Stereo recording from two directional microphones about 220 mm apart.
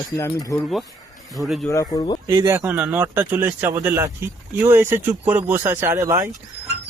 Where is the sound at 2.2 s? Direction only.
15° right (ahead or behind).